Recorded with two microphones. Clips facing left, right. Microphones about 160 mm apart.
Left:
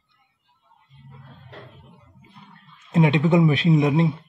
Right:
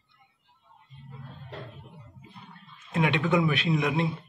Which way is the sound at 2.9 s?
25° left (ahead or behind).